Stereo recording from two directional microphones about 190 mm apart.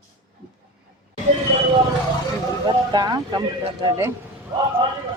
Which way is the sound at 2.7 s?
20° right (ahead or behind).